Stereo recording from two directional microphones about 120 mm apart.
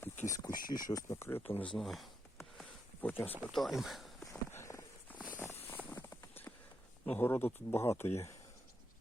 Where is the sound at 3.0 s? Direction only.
15° left (ahead or behind).